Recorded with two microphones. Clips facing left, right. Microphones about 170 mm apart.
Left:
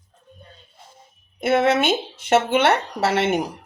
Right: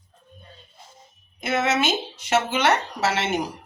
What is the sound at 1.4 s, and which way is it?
Speech, 55° left (ahead or behind).